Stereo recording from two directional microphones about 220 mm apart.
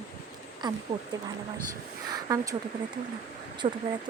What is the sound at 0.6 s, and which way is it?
Speech, 20° right (ahead or behind).